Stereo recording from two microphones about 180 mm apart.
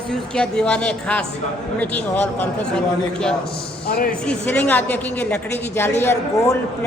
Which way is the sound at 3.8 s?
60° left (ahead or behind).